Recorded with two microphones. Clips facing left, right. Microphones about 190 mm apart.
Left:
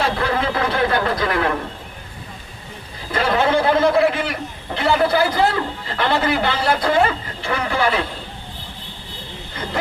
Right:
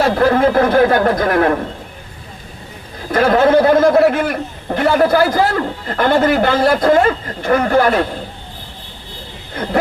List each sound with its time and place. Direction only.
0.0 s a man's voice: 45° right (ahead or behind)
3.1 s a man's voice: 50° right (ahead or behind)
9.6 s speech: 55° right (ahead or behind)